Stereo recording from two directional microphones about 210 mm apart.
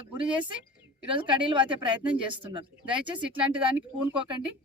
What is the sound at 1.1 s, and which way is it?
A woman's voice, 25° right (ahead or behind).